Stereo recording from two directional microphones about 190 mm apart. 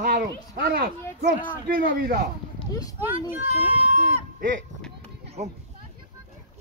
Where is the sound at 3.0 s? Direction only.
10° right (ahead or behind).